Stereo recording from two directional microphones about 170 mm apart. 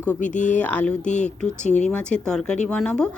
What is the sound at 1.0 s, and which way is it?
Speech, 45° left (ahead or behind).